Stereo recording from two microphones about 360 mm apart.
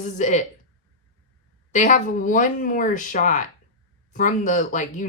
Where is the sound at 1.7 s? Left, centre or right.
Left.